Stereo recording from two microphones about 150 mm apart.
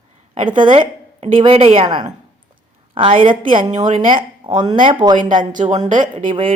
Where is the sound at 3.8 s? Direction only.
55° right (ahead or behind).